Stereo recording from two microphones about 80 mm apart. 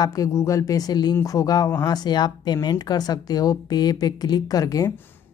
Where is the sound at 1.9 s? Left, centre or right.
Left.